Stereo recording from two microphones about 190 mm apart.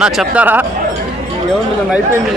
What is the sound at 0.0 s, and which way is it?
Speech, 5° right (ahead or behind).